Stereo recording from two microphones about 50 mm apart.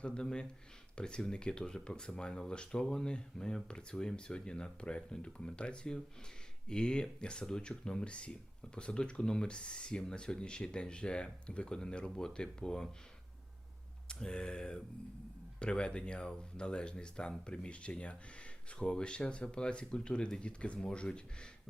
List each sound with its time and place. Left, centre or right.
0.0 s speech: centre
14.1 s speech: centre